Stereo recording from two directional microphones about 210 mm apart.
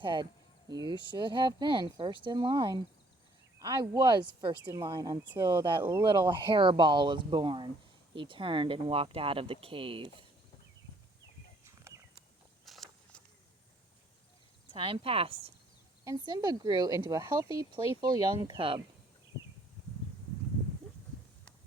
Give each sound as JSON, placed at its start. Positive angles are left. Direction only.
{"t": 0.0, "sound": "speech", "side_deg": -25}
{"t": 6.1, "sound": "speech", "side_deg": -20}
{"t": 12.6, "sound": "a sound", "side_deg": 0}
{"t": 14.7, "sound": "speech", "side_deg": -25}